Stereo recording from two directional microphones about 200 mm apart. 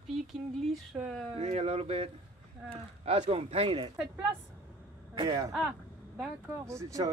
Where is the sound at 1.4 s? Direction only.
30° right (ahead or behind).